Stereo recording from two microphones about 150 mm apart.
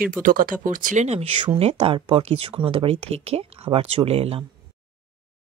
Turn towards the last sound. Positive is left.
turn(degrees=-40)  # may be behind; listen again after turning